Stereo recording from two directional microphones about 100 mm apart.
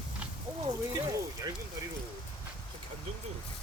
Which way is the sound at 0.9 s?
35° right (ahead or behind).